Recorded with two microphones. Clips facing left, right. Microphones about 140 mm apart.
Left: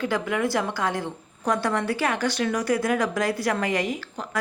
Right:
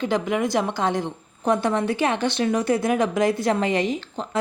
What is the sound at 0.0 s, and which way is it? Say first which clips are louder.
A woman's voice: right 2 dB; 20° right (ahead or behind).